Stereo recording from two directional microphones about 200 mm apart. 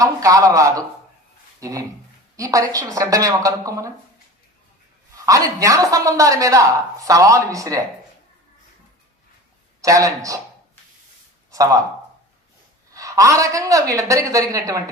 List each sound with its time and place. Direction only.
0.0 s a woman's voice: 15° right (ahead or behind)
2.3 s a woman's voice: 15° right (ahead or behind)
5.1 s a woman's voice: 15° right (ahead or behind)
9.8 s a woman's voice: 15° right (ahead or behind)
11.5 s speech: 15° right (ahead or behind)
12.9 s a woman's voice: 15° right (ahead or behind)